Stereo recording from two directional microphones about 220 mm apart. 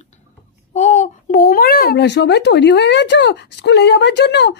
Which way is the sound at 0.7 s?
30° left (ahead or behind).